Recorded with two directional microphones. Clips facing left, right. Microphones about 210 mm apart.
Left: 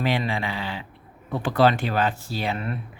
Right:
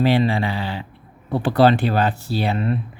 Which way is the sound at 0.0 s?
30° right (ahead or behind).